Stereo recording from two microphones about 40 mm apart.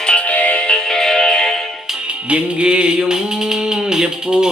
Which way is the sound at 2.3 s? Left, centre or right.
Right.